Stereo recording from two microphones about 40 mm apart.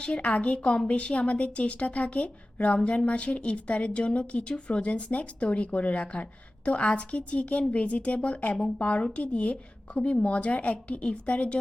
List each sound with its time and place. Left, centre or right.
0.0 s speech: left